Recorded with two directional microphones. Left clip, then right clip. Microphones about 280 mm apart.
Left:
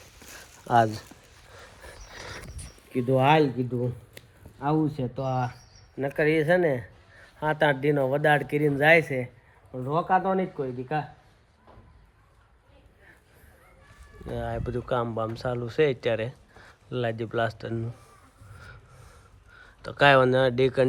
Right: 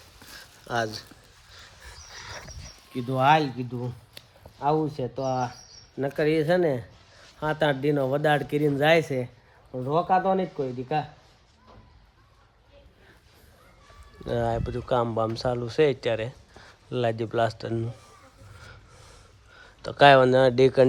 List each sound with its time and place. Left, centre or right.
0.3 s a sound: centre
3.6 s speech: left
4.6 s speech: centre
14.3 s speech: right
14.6 s speech: centre
19.5 s speech: centre